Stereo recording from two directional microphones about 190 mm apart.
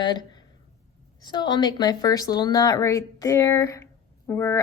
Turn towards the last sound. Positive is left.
turn(degrees=15)  # may be behind; listen again after turning